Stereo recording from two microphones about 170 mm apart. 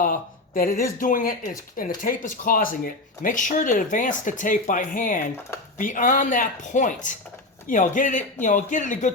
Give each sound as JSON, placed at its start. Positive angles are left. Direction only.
{"t": 0.0, "sound": "speech", "side_deg": 55}